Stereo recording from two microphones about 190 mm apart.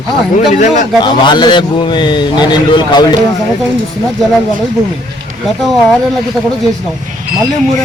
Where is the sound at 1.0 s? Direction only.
25° left (ahead or behind).